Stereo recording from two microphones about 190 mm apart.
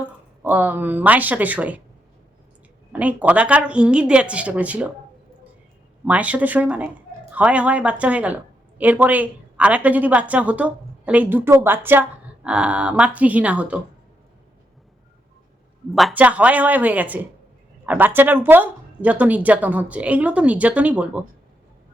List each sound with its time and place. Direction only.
0.4 s speech: 10° right (ahead or behind)
2.9 s speech: 5° right (ahead or behind)
6.1 s speech: 5° right (ahead or behind)
15.9 s speech: centre (ahead or behind)